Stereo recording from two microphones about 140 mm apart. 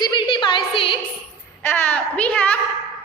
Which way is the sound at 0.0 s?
30° left (ahead or behind).